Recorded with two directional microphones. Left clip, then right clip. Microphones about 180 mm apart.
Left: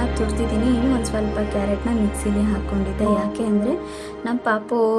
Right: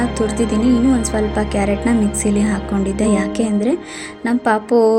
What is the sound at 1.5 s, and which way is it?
Speech, 20° right (ahead or behind).